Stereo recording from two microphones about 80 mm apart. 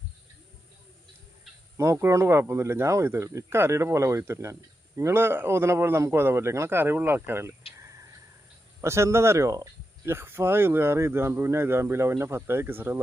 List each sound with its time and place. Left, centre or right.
1.7 s a man's voice: right
10.1 s a man's voice: right